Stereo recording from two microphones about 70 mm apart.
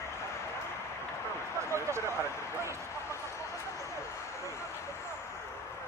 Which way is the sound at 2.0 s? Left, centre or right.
Left.